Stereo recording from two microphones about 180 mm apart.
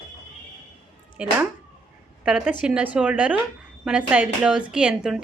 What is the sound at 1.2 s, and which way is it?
A woman's voice, 5° right (ahead or behind).